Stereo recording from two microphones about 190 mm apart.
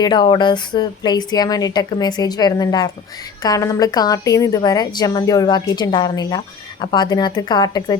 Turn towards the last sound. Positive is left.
turn(degrees=20)  # may be behind; listen again after turning